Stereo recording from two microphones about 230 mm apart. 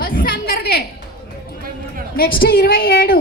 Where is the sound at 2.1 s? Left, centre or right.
Left.